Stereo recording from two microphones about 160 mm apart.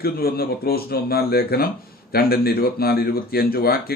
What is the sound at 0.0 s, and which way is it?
Speech, 70° left (ahead or behind).